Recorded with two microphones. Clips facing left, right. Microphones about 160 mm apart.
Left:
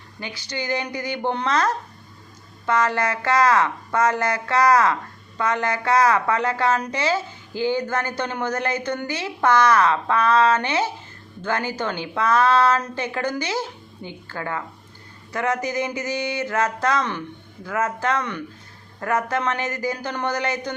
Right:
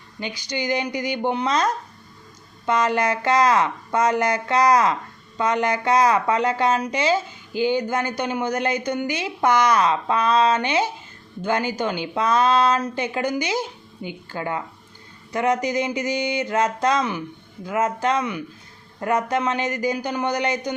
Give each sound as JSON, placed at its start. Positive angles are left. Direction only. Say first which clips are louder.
{"t": 0.2, "sound": "speech", "louder": "right 3 dB", "side_deg": -15}